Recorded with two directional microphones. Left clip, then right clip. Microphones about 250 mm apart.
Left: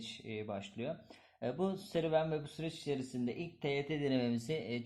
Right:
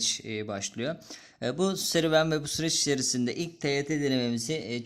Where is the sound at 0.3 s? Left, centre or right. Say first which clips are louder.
Right 8 dB; right.